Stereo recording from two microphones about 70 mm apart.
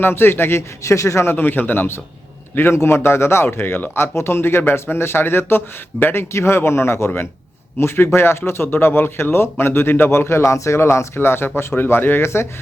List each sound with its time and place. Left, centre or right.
0.0 s speech: left